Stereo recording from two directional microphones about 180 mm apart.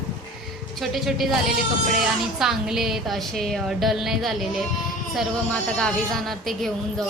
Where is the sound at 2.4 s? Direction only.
Centre (ahead or behind).